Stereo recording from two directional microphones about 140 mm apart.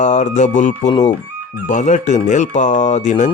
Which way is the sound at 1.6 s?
60° left (ahead or behind).